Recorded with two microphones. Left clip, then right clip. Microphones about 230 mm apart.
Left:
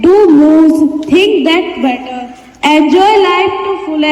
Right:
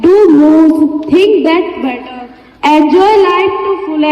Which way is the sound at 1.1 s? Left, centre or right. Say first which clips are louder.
Right 1 dB; left.